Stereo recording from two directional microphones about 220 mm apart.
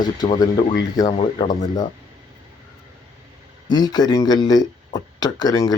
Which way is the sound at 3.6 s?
20° left (ahead or behind).